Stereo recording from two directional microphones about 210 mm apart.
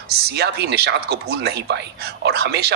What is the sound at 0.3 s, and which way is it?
Speech, 50° right (ahead or behind).